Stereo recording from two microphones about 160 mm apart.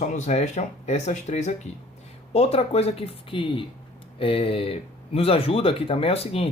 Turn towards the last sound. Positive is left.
turn(degrees=40)  # may be behind; listen again after turning